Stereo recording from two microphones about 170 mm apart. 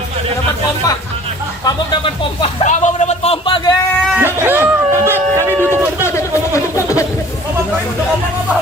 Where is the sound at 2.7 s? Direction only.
45° left (ahead or behind).